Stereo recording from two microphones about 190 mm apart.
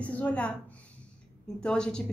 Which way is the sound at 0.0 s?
5° left (ahead or behind).